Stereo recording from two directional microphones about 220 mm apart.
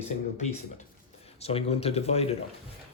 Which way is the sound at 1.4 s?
25° left (ahead or behind).